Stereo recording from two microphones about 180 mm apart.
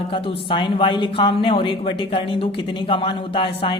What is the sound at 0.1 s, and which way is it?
A woman's voice, 30° left (ahead or behind).